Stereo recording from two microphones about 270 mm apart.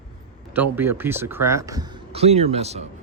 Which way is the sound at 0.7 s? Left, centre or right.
Centre.